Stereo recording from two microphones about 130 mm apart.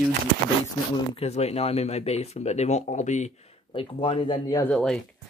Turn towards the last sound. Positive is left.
turn(degrees=5)  # may be behind; listen again after turning